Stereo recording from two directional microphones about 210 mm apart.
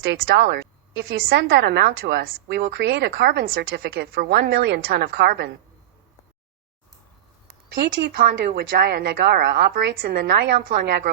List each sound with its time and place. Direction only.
0.1 s a woman's voice: 55° right (ahead or behind)
8.0 s speech: 55° right (ahead or behind)